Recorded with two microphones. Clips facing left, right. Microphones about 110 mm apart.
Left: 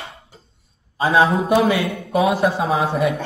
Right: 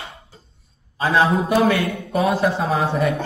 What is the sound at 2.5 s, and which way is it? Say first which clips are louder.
Speech: left 1 dB; 5° left (ahead or behind).